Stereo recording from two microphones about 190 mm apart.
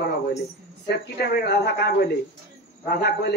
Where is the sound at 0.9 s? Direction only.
60° left (ahead or behind).